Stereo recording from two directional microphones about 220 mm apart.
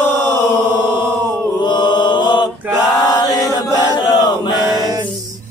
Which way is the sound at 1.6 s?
20° left (ahead or behind).